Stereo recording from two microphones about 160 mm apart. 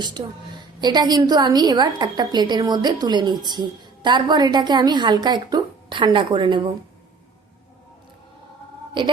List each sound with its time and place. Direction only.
0.2 s a woman's voice: 30° right (ahead or behind)
9.0 s a woman's voice: 30° right (ahead or behind)